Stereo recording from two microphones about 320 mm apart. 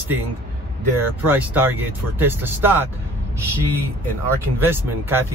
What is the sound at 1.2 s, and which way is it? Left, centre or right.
Speech, centre.